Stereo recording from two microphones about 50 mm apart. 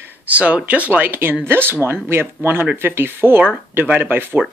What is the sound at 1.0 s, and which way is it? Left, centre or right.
Speech, right.